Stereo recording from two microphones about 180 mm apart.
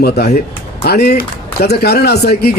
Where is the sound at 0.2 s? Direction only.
65° left (ahead or behind).